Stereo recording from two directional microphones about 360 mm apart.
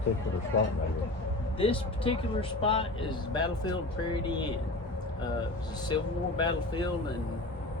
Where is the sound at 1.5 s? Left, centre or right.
Centre.